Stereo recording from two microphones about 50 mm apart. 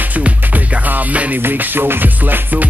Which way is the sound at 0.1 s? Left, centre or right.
Right.